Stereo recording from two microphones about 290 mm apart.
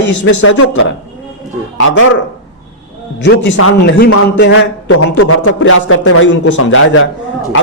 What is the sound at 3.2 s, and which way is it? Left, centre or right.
A man's voice, left.